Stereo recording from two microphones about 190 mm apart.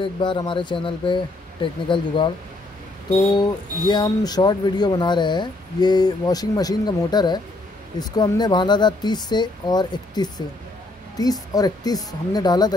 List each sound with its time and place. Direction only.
0.0 s speech: 25° left (ahead or behind)
3.3 s speech: 25° left (ahead or behind)